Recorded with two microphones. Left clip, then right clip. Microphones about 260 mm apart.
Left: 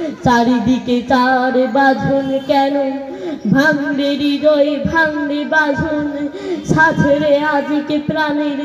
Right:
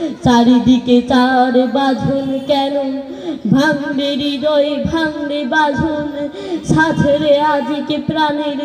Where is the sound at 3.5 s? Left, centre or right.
Right.